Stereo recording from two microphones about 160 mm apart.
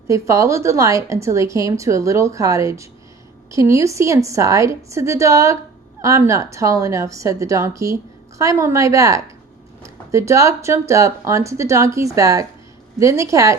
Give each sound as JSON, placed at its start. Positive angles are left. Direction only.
{"t": 0.1, "sound": "a woman's voice", "side_deg": -20}